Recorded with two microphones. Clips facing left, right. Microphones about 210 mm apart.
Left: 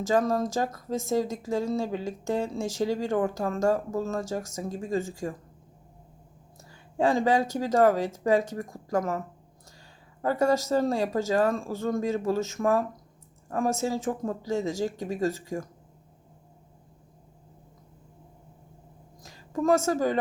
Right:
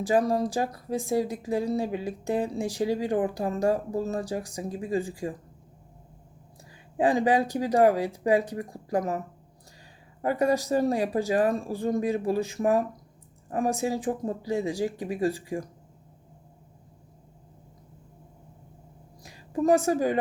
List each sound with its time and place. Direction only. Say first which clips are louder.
0.0 s speech: right 1 dB; 15° right (ahead or behind)
6.9 s speech: right 1 dB; 15° right (ahead or behind)
19.2 s a woman's voice: right 1 dB; 15° right (ahead or behind)